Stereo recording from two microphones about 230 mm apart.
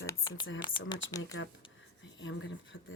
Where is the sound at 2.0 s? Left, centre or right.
Left.